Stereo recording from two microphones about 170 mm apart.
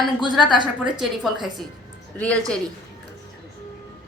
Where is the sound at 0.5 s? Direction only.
25° right (ahead or behind).